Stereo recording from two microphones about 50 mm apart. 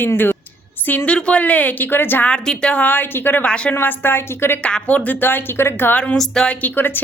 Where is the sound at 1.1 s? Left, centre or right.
Left.